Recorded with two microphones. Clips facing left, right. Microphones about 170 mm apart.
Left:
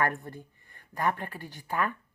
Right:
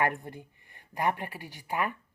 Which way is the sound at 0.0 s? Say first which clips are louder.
Even; 20° right (ahead or behind).